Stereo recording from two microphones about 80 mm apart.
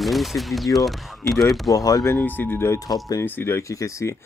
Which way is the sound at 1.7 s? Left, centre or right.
Left.